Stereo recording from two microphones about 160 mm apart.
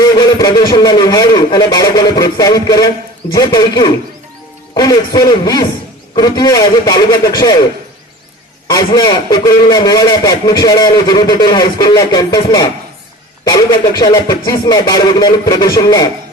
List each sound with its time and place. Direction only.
0.0 s a man's voice: 25° left (ahead or behind)
8.7 s a man's voice: 25° left (ahead or behind)